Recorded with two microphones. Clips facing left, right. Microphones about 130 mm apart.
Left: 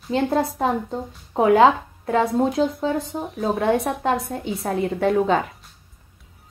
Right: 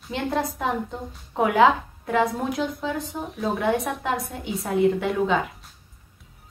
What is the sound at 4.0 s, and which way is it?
A woman's voice, 35° left (ahead or behind).